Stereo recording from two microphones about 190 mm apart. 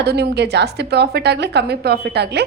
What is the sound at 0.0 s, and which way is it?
A woman's voice, 60° right (ahead or behind).